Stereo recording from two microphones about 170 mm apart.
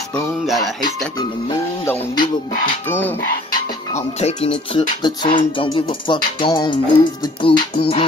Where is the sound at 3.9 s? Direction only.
40° left (ahead or behind).